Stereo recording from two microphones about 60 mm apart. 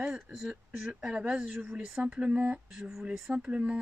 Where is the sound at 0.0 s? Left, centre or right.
Centre.